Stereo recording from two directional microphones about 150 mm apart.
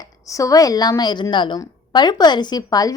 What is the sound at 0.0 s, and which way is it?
A woman's voice, 20° left (ahead or behind).